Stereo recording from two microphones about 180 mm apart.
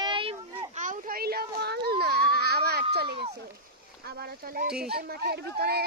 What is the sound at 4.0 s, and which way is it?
A child's voice, 65° right (ahead or behind).